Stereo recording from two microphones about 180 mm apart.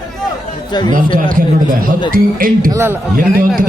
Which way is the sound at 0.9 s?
50° right (ahead or behind).